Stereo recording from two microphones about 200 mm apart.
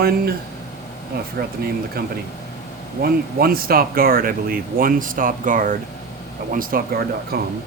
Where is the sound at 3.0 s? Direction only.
50° right (ahead or behind).